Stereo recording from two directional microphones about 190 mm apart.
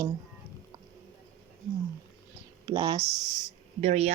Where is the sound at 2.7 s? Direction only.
20° right (ahead or behind).